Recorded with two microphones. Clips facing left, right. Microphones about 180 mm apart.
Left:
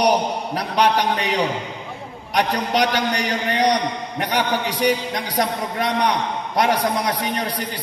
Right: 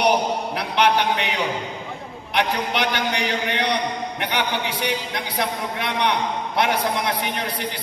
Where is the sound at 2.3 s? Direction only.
40° left (ahead or behind).